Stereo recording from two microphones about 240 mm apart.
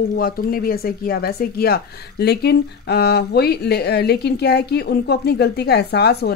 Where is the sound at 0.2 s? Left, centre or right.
Left.